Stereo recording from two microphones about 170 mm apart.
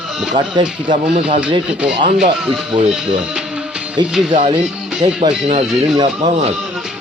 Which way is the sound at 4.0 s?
25° right (ahead or behind).